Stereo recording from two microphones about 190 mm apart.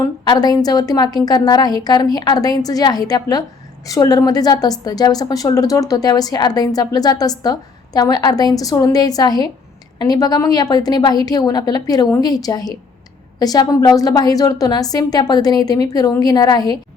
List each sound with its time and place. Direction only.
0.3 s a woman's voice: 20° left (ahead or behind)